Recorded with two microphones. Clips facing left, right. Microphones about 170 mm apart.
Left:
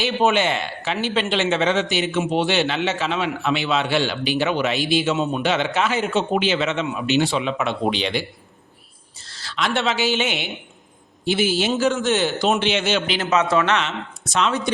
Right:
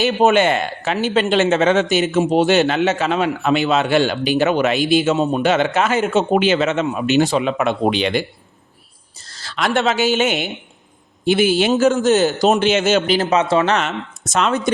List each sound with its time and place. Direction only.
0.0 s speech: 45° right (ahead or behind)
9.1 s a woman's voice: 40° right (ahead or behind)
11.3 s a man's voice: 55° right (ahead or behind)
11.7 s speech: 40° right (ahead or behind)